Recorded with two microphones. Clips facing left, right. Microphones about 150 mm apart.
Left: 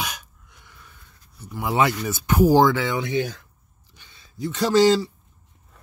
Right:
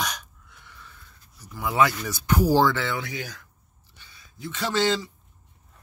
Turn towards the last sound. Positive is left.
turn(degrees=40)  # may be behind; listen again after turning